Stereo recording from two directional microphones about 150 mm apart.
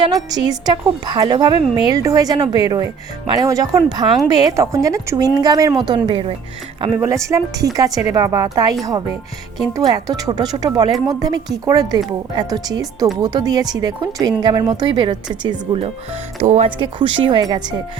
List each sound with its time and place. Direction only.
0.3 s speech: 25° right (ahead or behind)
5.9 s speech: 35° right (ahead or behind)
7.0 s speech: 20° right (ahead or behind); by 15.9 s 35° right (ahead or behind)
16.4 s speech: 50° right (ahead or behind)
16.6 s speech: 35° right (ahead or behind)